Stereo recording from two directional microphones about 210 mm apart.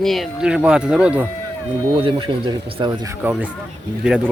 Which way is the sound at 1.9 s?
25° right (ahead or behind).